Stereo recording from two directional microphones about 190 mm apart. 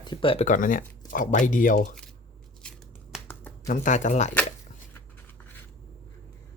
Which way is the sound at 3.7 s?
40° left (ahead or behind).